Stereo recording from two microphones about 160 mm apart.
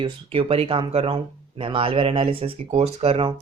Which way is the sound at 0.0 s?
35° right (ahead or behind).